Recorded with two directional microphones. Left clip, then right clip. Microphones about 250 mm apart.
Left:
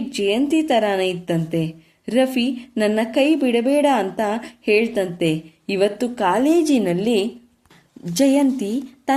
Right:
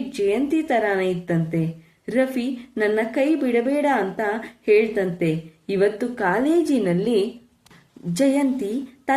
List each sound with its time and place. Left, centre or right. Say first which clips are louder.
0.2 s a woman's voice: left 2 dB; left